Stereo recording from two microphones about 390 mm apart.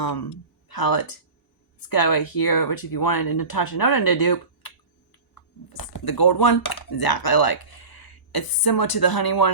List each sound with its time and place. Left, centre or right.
0.0 s speech: left